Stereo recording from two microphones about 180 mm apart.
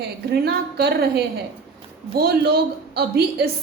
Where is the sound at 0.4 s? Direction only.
65° right (ahead or behind).